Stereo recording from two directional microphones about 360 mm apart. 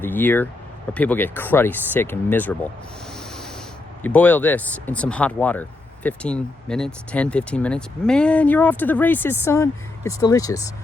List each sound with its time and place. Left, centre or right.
0.0 s speech: centre
3.2 s sanding: centre
4.0 s speech: centre